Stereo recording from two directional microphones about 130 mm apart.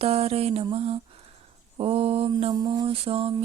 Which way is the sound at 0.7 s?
50° right (ahead or behind).